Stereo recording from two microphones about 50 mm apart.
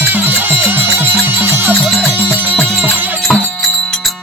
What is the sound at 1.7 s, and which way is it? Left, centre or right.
Music, centre.